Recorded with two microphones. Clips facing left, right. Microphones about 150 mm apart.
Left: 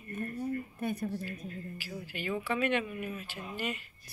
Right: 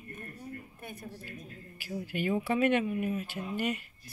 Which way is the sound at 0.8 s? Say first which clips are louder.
Left 11 dB; 80° left.